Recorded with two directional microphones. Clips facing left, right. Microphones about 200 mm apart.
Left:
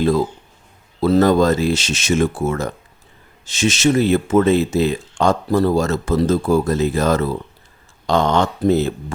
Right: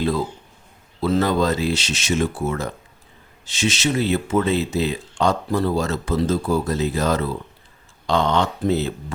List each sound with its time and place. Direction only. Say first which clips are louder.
1.0 s speech: left 6 dB; 40° left (ahead or behind)